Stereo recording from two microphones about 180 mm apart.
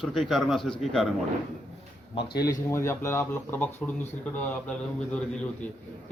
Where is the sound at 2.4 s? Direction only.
20° left (ahead or behind).